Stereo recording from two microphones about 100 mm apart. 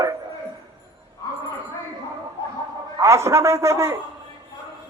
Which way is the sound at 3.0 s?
30° right (ahead or behind).